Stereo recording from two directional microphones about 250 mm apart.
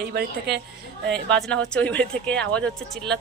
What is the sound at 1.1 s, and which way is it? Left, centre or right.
Speech, centre.